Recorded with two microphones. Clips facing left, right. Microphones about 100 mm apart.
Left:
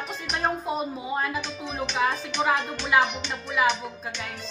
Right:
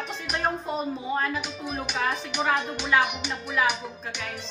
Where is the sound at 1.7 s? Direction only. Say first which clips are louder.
Left 1 dB; 10° right (ahead or behind).